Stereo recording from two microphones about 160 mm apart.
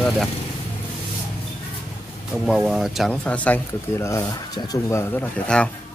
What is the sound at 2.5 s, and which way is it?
Speech, centre (ahead or behind).